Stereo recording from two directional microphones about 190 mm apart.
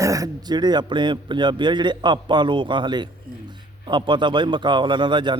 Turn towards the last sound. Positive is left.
turn(degrees=-25)  # may be behind; listen again after turning